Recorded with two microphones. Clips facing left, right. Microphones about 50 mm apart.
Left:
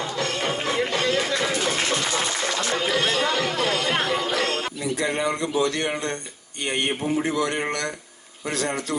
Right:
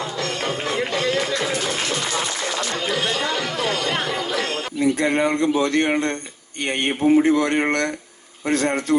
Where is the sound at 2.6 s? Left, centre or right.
Centre.